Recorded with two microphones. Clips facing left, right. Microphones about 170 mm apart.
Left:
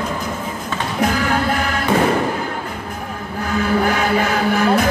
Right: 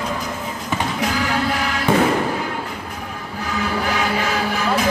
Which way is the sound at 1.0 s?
50° left (ahead or behind).